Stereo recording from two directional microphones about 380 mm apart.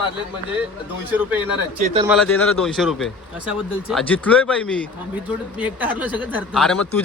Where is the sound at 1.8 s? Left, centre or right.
Centre.